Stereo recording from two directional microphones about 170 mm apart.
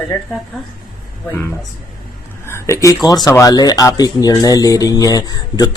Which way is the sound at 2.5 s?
20° left (ahead or behind).